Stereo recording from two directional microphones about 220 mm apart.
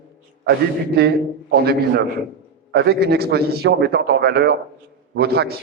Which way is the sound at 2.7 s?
45° right (ahead or behind).